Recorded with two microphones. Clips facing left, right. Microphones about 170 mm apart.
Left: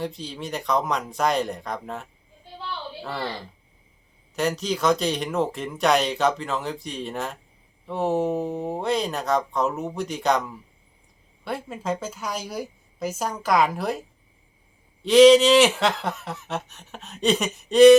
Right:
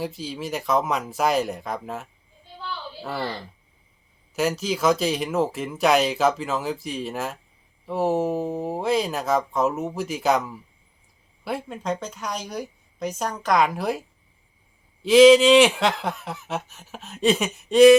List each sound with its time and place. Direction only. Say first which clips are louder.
0.0 s speech: right 1 dB; 5° right (ahead or behind)
4.4 s speech: right 1 dB; 5° right (ahead or behind)
15.0 s speech: right 1 dB; centre (ahead or behind)